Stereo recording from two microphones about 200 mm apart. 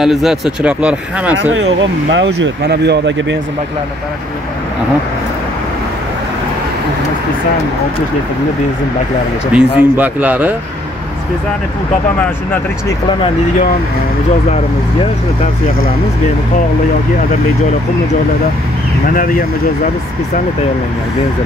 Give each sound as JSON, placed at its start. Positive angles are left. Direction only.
{"t": 0.0, "sound": "speech", "side_deg": 0}
{"t": 1.5, "sound": "speech", "side_deg": -65}
{"t": 9.5, "sound": "a man's voice", "side_deg": -5}
{"t": 19.0, "sound": "speech", "side_deg": 45}